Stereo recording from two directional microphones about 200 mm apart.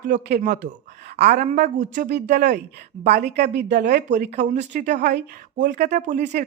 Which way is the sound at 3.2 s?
55° right (ahead or behind).